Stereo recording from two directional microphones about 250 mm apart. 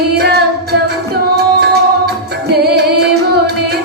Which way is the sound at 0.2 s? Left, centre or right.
Right.